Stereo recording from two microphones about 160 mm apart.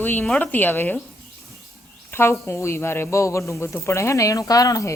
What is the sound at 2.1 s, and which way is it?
Speech, 15° left (ahead or behind).